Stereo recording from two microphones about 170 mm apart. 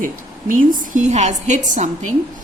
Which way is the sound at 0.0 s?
50° right (ahead or behind).